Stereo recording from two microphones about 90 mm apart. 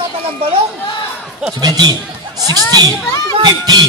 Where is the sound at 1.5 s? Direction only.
45° right (ahead or behind).